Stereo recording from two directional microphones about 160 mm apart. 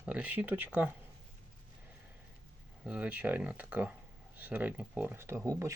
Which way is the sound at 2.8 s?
5° right (ahead or behind).